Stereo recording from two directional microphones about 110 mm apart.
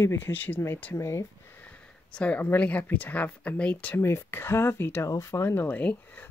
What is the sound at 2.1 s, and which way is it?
Speech, 10° left (ahead or behind).